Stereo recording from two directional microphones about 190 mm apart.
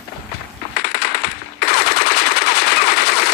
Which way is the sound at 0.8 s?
55° left (ahead or behind).